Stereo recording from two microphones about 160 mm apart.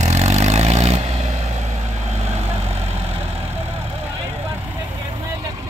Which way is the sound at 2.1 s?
45° right (ahead or behind).